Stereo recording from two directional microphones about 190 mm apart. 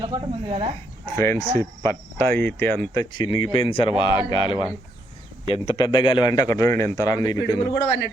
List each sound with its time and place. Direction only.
0.0 s speech: 25° right (ahead or behind)
1.1 s speech: 15° left (ahead or behind)
2.9 s speech: 20° left (ahead or behind)
7.7 s a man's voice: 70° left (ahead or behind)